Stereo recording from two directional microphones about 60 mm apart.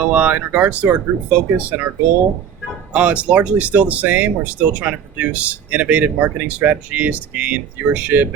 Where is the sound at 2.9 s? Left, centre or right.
Right.